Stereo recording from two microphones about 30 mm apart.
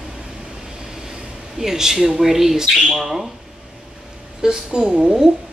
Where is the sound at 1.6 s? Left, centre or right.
Centre.